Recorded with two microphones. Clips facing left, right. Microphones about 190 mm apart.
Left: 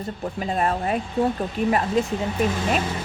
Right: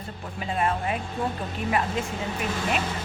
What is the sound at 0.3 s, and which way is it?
Speech, 40° left (ahead or behind).